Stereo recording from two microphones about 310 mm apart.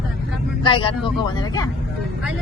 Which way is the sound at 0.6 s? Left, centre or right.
Centre.